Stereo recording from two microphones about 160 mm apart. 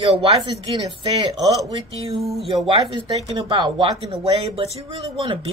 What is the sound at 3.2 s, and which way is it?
Speech, 30° right (ahead or behind).